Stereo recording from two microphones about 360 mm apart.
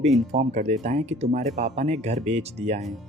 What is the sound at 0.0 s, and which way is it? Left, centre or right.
Speech, centre.